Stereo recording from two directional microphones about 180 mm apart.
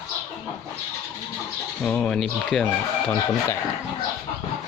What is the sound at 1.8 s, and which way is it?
Speech, 5° left (ahead or behind).